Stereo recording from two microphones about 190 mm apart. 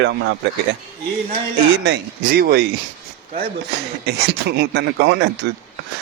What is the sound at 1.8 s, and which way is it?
Speech, 60° right (ahead or behind).